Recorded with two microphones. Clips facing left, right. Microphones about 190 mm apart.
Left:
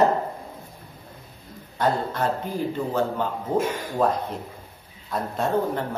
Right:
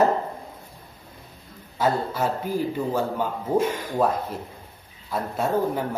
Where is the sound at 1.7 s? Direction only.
5° right (ahead or behind).